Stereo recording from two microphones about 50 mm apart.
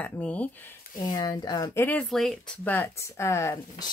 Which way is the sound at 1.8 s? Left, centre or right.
Left.